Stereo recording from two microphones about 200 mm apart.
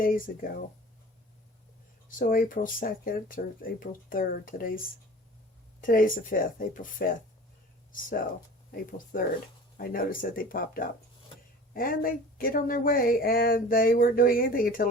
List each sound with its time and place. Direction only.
0.0 s speech: 45° left (ahead or behind)
2.0 s speech: 45° left (ahead or behind)
5.8 s speech: 45° left (ahead or behind)
8.7 s speech: 45° left (ahead or behind)